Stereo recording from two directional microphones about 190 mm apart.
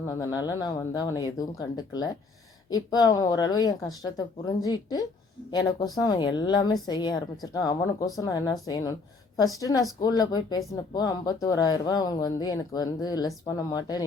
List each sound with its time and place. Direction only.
0.0 s speech: 20° left (ahead or behind)